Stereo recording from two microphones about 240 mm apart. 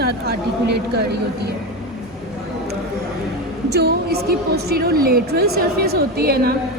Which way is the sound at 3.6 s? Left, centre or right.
Right.